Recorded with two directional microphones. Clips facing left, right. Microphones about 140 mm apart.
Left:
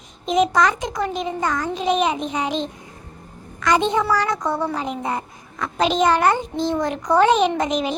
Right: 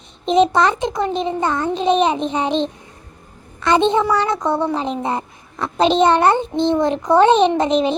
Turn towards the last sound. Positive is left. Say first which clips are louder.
# right 5 dB
turn(degrees=-25)  # may be behind; listen again after turning